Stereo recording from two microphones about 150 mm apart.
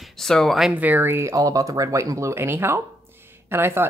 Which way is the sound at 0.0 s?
Centre (ahead or behind).